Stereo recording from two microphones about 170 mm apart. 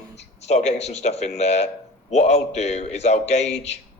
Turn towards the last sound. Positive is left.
turn(degrees=40)  # may be behind; listen again after turning